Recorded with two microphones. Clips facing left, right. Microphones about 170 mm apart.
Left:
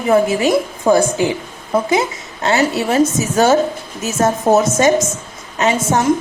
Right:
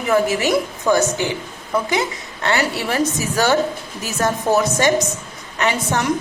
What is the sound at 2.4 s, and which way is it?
A woman's voice, 25° left (ahead or behind).